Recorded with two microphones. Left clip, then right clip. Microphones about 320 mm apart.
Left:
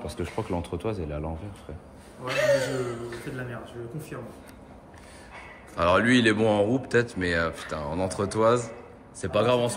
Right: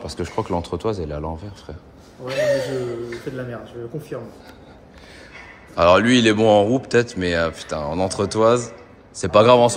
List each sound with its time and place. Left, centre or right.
0.0 s speech: centre
2.2 s speech: left
3.3 s speech: centre
5.8 s speech: centre